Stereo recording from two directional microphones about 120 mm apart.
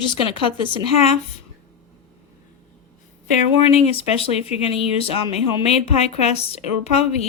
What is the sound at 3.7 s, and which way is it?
A woman's voice, 55° left (ahead or behind).